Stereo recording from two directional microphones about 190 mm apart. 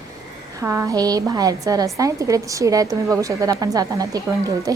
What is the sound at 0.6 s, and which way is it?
A woman's voice, 15° right (ahead or behind).